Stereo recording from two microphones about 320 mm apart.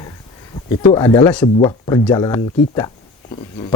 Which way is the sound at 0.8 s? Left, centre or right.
Centre.